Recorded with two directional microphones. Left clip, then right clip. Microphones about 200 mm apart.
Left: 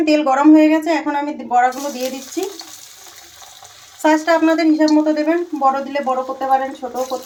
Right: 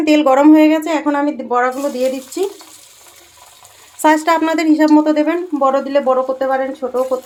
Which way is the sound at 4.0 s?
50° right (ahead or behind).